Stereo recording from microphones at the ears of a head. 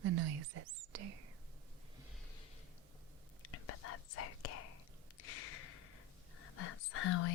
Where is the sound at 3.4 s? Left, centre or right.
Left.